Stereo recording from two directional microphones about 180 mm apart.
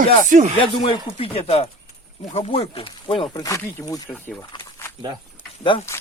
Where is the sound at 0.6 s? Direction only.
30° left (ahead or behind).